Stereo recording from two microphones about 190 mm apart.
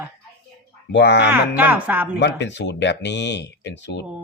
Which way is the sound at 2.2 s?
65° left (ahead or behind).